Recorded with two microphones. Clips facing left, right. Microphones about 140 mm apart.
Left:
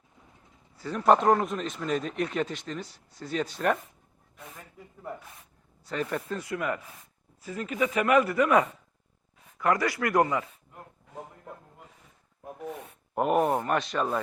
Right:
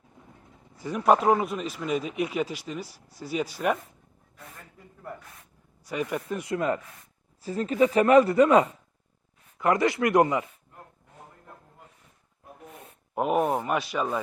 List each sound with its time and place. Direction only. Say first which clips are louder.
0.8 s a man's voice: even; 10° right (ahead or behind)
5.8 s a man's voice: right 1 dB; 10° right (ahead or behind)
6.4 s speech: right 4 dB; 25° right (ahead or behind)
13.1 s speech: even; centre (ahead or behind)